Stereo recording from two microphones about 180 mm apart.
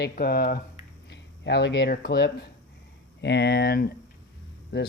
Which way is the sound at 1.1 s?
70° left (ahead or behind).